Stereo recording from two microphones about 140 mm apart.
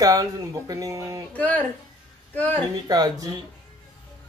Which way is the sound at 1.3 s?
10° left (ahead or behind).